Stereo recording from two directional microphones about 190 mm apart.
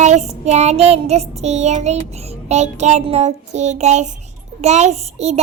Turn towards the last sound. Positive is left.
turn(degrees=-35)  # may be behind; listen again after turning